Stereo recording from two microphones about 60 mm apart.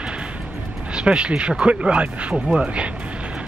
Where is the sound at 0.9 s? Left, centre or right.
Centre.